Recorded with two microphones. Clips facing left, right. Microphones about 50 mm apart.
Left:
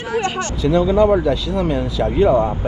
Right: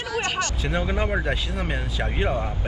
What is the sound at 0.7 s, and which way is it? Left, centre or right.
Speech, right.